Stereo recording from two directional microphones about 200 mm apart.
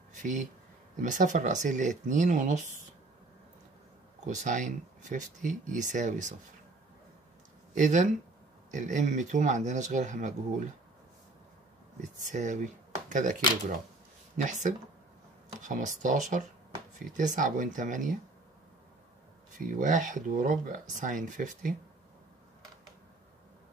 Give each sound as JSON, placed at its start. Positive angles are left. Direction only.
{"t": 0.1, "sound": "speech", "side_deg": -40}
{"t": 4.3, "sound": "speech", "side_deg": -40}
{"t": 7.7, "sound": "speech", "side_deg": -40}
{"t": 12.3, "sound": "speech", "side_deg": -40}
{"t": 19.5, "sound": "speech", "side_deg": -40}